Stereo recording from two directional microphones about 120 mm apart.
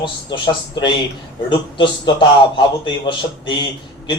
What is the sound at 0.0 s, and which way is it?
Speech, 40° left (ahead or behind).